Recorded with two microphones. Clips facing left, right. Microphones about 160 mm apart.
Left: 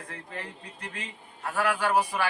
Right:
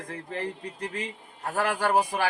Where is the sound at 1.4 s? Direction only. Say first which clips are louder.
Right 1 dB; 40° right (ahead or behind).